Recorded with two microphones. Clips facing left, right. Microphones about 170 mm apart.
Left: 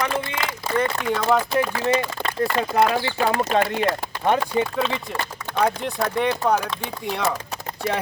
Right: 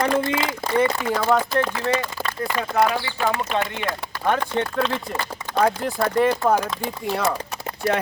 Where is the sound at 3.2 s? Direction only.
35° left (ahead or behind).